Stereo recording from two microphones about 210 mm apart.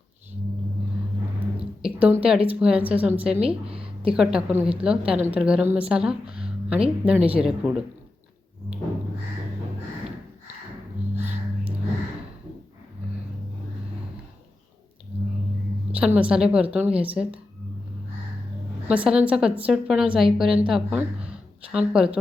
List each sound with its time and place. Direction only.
1.5 s a woman's voice: 5° right (ahead or behind)
3.4 s a sound: 25° right (ahead or behind)
4.1 s a woman's voice: 5° right (ahead or behind)
16.1 s a woman's voice: 5° right (ahead or behind)
18.9 s a woman's voice: 5° right (ahead or behind)